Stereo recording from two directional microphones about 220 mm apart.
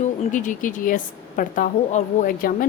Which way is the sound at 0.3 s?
35° left (ahead or behind).